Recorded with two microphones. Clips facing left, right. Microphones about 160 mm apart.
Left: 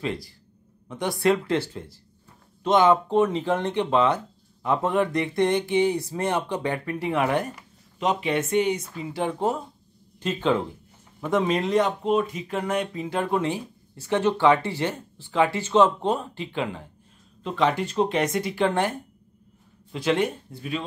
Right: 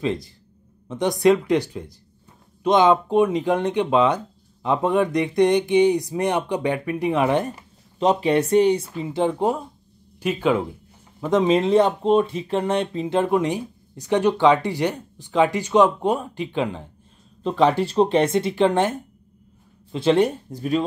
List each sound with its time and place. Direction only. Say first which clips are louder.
0.0 s speech: right 5 dB; 20° right (ahead or behind)
8.0 s speech: right 6 dB; 35° right (ahead or behind)
8.9 s speech: right 5 dB; 20° right (ahead or behind)
17.4 s speech: right 5 dB; 35° right (ahead or behind)